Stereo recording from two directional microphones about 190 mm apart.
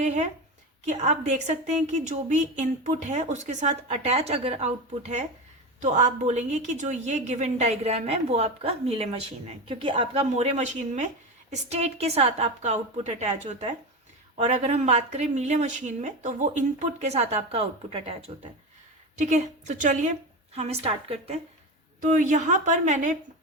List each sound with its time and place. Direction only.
0.0 s a woman's voice: 35° right (ahead or behind)